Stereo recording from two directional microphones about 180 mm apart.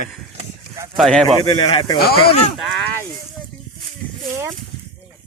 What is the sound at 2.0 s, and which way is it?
Speech, 60° left (ahead or behind).